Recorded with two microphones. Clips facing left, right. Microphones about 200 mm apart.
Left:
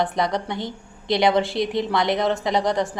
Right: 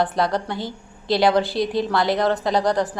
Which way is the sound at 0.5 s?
20° left (ahead or behind).